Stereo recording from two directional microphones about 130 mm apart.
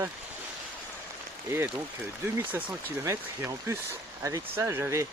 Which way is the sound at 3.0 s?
20° right (ahead or behind).